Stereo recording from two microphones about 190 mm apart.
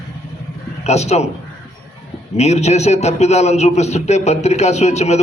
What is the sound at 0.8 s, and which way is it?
Speech, 35° left (ahead or behind).